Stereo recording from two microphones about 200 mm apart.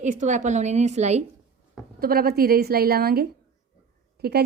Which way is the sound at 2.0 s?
50° right (ahead or behind).